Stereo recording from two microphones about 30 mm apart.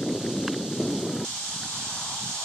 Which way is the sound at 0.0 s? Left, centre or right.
Centre.